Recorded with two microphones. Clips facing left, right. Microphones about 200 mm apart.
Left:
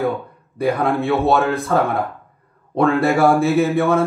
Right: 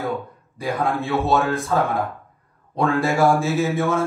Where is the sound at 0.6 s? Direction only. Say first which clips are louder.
Left 5 dB; 60° left (ahead or behind).